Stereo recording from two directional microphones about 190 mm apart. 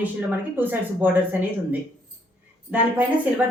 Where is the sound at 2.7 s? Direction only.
10° right (ahead or behind).